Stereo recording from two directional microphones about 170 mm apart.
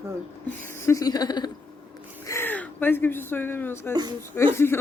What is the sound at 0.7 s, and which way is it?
Speech, 15° left (ahead or behind).